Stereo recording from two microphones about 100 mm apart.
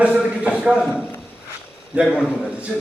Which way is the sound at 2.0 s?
5° right (ahead or behind).